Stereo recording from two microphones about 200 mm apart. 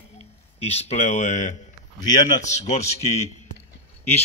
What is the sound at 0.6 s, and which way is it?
A man's voice, 30° left (ahead or behind).